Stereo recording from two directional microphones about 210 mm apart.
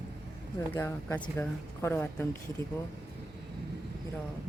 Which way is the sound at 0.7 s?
10° left (ahead or behind).